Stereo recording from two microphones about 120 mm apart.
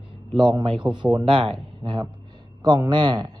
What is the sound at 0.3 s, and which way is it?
A man's voice, 40° right (ahead or behind).